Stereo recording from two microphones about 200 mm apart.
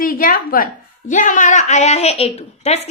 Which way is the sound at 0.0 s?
45° left (ahead or behind).